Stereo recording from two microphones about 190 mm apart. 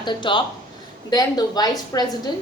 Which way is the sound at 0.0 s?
25° left (ahead or behind).